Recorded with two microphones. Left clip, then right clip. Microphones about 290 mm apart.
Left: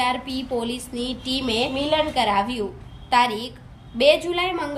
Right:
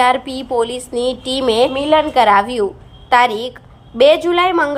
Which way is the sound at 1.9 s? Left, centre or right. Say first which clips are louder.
Right 9 dB; right.